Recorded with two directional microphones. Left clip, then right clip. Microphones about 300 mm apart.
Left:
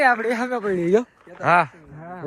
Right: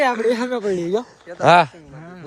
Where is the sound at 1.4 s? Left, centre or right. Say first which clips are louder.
Right 5 dB; centre.